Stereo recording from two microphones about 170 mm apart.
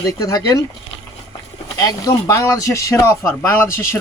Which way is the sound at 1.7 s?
20° left (ahead or behind).